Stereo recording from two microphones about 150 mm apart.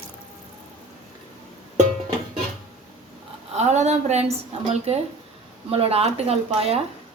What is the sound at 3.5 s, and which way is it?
A woman's voice, 50° right (ahead or behind).